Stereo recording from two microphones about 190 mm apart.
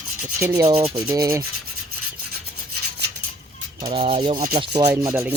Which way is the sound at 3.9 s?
30° right (ahead or behind).